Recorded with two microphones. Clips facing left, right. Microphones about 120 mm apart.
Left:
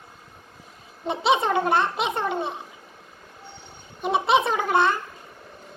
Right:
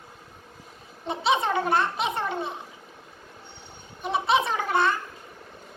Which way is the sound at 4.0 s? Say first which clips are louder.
Left 3 dB; 25° left (ahead or behind).